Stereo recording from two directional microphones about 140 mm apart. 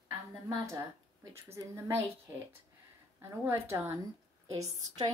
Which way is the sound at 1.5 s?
20° right (ahead or behind).